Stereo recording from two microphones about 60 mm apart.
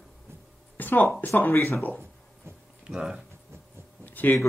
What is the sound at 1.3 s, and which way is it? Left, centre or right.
Speech, left.